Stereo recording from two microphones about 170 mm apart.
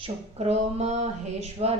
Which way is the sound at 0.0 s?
40° right (ahead or behind).